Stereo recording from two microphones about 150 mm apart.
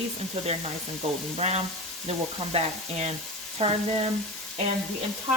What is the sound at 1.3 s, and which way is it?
Frying, 45° right (ahead or behind).